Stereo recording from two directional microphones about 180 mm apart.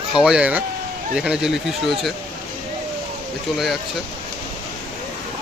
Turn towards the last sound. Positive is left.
turn(degrees=0)  # may be behind; listen again after turning